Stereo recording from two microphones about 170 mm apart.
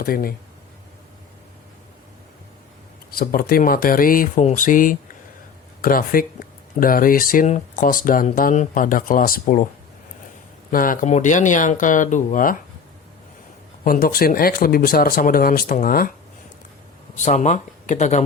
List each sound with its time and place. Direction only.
0.0 s speech: 60° left (ahead or behind)
3.2 s speech: 60° left (ahead or behind)
10.7 s speech: 55° left (ahead or behind)
13.8 s speech: 55° left (ahead or behind)
17.2 s speech: 45° left (ahead or behind)